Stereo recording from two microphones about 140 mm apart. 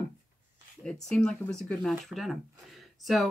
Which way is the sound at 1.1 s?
5° left (ahead or behind).